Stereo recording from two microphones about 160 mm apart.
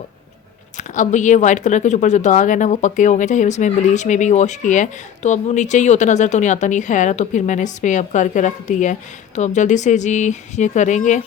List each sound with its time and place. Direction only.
0.8 s speech: 50° left (ahead or behind)